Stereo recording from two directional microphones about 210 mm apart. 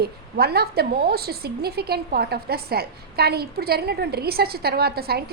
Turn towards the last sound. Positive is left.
turn(degrees=-50)  # may be behind; listen again after turning